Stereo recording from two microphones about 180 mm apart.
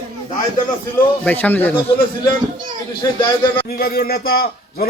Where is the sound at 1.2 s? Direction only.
10° left (ahead or behind).